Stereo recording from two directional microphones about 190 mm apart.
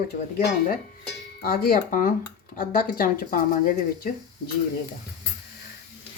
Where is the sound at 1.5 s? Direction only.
50° left (ahead or behind).